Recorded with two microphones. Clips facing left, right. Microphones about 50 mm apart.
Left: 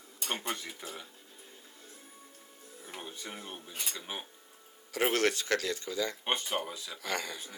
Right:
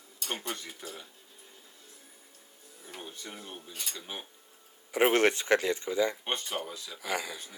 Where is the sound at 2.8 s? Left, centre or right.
Centre.